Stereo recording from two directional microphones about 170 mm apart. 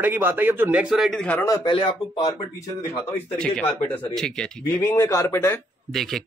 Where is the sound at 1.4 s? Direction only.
25° left (ahead or behind).